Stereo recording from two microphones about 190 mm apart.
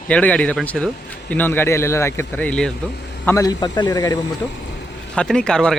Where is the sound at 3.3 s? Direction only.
20° left (ahead or behind).